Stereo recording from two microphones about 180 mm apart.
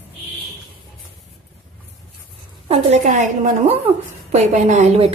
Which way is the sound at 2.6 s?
40° right (ahead or behind).